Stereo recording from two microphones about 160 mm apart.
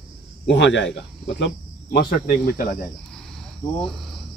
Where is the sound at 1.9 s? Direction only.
70° left (ahead or behind).